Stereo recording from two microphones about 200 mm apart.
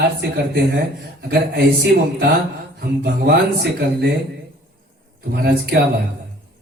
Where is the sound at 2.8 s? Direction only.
55° right (ahead or behind).